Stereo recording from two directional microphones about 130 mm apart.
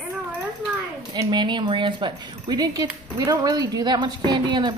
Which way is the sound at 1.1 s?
35° right (ahead or behind).